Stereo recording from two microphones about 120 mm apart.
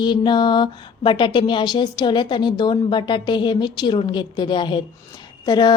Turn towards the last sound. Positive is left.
turn(degrees=35)  # may be behind; listen again after turning